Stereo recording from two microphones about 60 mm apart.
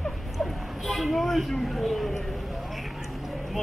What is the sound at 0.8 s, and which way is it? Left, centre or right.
Speech, centre.